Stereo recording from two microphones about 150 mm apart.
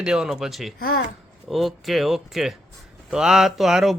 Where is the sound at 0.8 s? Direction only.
90° left.